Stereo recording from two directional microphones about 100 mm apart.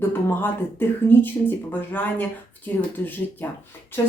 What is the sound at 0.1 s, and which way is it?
Speech, 20° left (ahead or behind).